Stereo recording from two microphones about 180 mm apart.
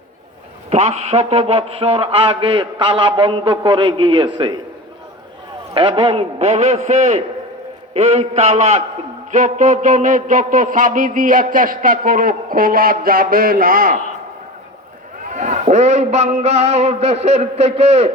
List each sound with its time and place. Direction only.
0.7 s a man's voice: 35° right (ahead or behind)
5.7 s a man's voice: 30° right (ahead or behind); by 14.0 s 50° right (ahead or behind)
15.2 s a man's voice: 45° right (ahead or behind)